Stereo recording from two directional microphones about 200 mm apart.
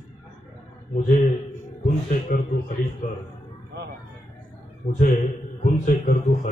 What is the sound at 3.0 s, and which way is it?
Speech, 45° left (ahead or behind).